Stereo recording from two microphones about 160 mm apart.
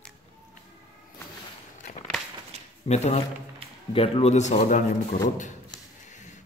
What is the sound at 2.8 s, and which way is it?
Speech, 40° left (ahead or behind).